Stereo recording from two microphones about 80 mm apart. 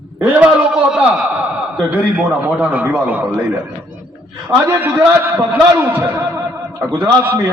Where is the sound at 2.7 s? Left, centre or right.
Centre.